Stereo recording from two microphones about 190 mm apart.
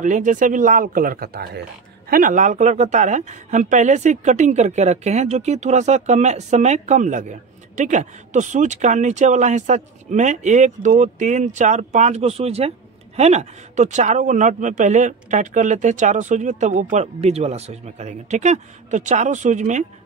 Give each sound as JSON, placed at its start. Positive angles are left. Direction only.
{"t": 0.0, "sound": "speech", "side_deg": -40}